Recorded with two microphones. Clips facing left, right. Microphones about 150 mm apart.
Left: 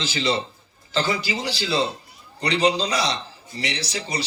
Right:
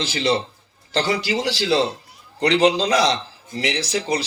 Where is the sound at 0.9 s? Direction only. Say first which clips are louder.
Right 3 dB; 75° right (ahead or behind).